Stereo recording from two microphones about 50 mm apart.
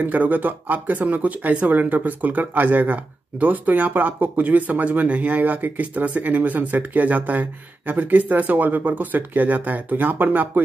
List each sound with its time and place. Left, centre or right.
0.0 s speech: right